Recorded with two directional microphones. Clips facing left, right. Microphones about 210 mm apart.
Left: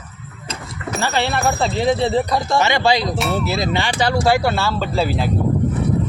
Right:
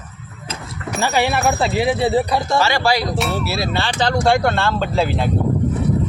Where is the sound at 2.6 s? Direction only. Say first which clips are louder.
Left 1 dB; 20° left (ahead or behind).